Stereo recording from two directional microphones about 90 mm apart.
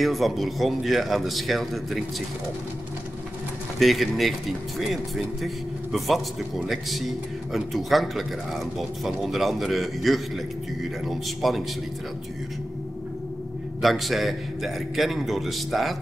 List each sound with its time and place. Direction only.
0.0 s speech: centre (ahead or behind)
3.8 s speech: centre (ahead or behind)
13.7 s speech: centre (ahead or behind)